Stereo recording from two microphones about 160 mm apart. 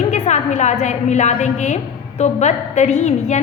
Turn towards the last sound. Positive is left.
turn(degrees=45)  # may be behind; listen again after turning